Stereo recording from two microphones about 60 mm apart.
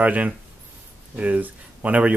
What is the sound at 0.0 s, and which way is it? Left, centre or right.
Speech, right.